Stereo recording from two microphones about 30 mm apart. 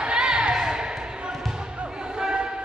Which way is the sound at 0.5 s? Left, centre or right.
Right.